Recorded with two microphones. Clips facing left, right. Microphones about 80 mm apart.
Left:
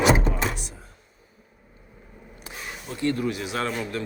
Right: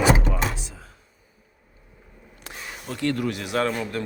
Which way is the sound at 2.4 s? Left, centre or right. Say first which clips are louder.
Right 1 dB; right.